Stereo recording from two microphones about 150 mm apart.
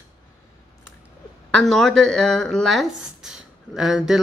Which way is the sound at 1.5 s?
Centre (ahead or behind).